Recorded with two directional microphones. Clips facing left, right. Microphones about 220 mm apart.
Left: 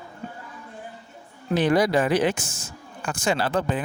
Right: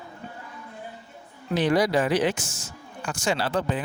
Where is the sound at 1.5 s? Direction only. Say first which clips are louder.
Left 2 dB; 55° left (ahead or behind).